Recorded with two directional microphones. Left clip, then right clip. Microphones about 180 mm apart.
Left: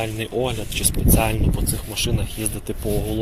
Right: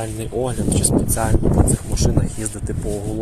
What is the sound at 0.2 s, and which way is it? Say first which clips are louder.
Speech: right 2 dB; 20° right (ahead or behind).